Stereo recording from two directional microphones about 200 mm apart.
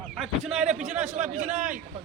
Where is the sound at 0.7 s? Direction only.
35° right (ahead or behind).